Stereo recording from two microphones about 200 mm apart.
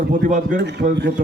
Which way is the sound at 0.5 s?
60° right (ahead or behind).